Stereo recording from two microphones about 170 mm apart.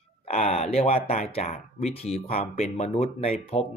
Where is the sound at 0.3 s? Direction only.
40° left (ahead or behind).